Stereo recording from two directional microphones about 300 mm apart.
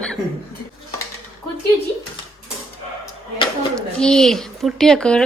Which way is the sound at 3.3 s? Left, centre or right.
Centre.